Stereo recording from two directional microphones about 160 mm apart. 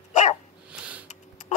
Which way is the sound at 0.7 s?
5° right (ahead or behind).